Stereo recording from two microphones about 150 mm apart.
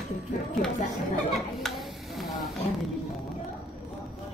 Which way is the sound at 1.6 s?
Centre (ahead or behind).